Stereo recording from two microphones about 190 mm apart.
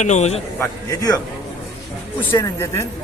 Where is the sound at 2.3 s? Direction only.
15° left (ahead or behind).